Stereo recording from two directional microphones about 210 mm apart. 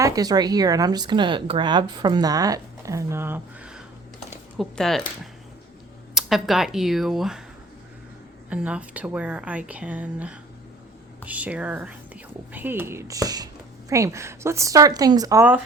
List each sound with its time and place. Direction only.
0.0 s speech: 20° right (ahead or behind); by 7.4 s centre (ahead or behind)
8.4 s speech: 5° right (ahead or behind)